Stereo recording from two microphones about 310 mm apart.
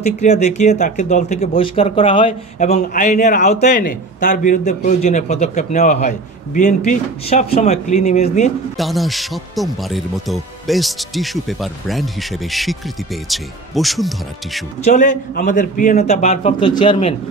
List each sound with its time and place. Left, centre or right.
0.0 s speech: left
8.7 s speech: centre
14.8 s speech: left